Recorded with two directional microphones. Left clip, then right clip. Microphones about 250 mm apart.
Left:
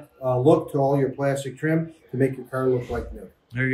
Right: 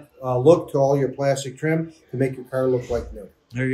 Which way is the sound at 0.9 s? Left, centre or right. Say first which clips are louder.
Right 2 dB; right.